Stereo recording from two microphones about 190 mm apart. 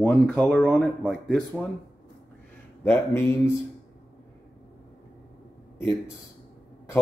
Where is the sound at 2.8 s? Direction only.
10° left (ahead or behind).